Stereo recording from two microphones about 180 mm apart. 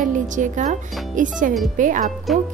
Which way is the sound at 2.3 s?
Centre (ahead or behind).